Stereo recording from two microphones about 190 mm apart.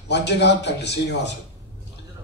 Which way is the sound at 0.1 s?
65° left (ahead or behind).